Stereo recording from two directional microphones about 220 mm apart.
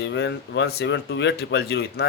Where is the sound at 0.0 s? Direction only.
50° left (ahead or behind).